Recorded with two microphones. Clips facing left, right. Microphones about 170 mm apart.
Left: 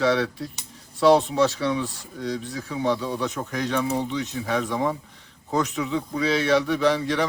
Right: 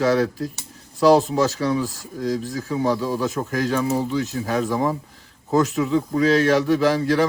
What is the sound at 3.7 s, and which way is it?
Speech, 5° right (ahead or behind).